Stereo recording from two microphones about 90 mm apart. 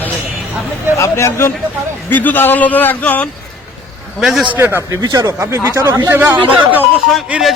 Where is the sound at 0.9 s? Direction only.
35° left (ahead or behind).